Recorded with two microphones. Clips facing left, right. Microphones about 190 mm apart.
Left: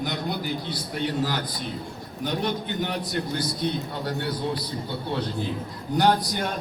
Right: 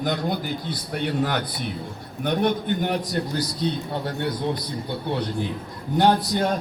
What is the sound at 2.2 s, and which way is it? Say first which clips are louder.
Speech: right 5 dB; 55° right (ahead or behind).